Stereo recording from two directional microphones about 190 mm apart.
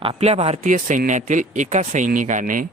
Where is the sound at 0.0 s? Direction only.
30° right (ahead or behind).